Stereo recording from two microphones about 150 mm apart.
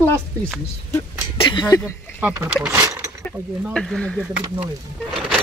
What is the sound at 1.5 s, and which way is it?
Speech, 30° left (ahead or behind).